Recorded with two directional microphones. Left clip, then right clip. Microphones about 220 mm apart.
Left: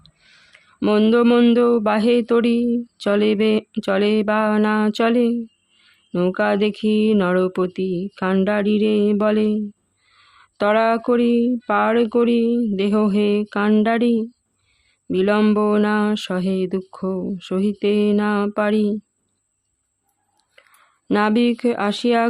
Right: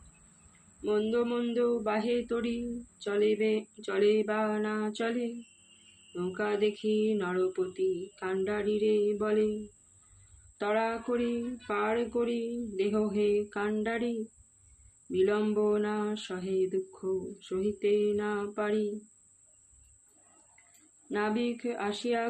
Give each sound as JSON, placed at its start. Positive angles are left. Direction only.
{"t": 0.8, "sound": "mantra", "side_deg": 50}
{"t": 10.6, "sound": "mantra", "side_deg": 50}
{"t": 21.1, "sound": "mantra", "side_deg": 50}